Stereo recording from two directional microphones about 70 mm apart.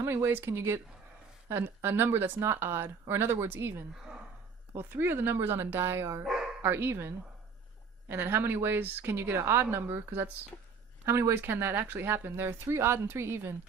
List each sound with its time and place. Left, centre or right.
0.3 s speech: right
6.2 s speech: centre
6.6 s speech: right
11.0 s speech: right